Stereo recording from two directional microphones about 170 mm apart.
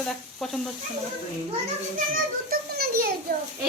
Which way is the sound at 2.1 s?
60° right (ahead or behind).